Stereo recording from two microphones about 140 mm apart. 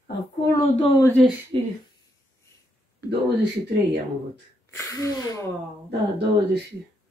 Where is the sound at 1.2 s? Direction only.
Centre (ahead or behind).